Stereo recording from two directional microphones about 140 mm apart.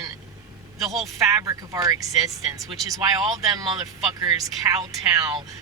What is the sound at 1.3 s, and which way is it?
A man's voice, 25° right (ahead or behind).